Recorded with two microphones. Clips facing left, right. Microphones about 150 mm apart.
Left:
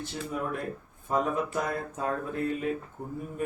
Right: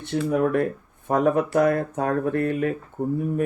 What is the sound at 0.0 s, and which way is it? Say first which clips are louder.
Speech: right 11 dB; 65° right (ahead or behind).